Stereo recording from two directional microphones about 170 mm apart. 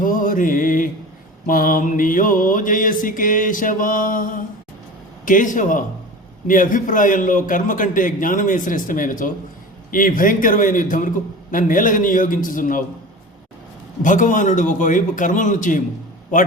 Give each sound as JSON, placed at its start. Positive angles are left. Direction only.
{"t": 0.0, "sound": "mantra", "side_deg": 55}
{"t": 14.0, "sound": "mantra", "side_deg": 50}